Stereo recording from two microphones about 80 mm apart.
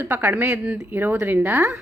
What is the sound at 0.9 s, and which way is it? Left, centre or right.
Speech, right.